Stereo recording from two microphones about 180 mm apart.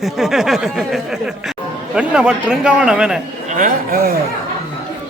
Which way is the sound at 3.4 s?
45° right (ahead or behind).